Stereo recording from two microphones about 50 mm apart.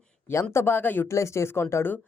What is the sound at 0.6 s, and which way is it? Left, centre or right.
Speech, left.